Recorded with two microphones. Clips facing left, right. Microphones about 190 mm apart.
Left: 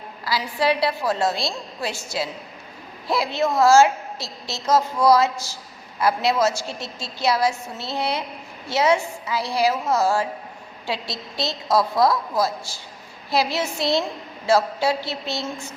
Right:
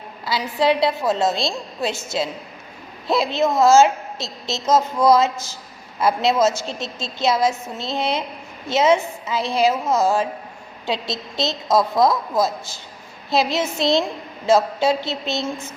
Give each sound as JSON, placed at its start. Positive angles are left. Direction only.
{"t": 0.3, "sound": "a woman's voice", "side_deg": -20}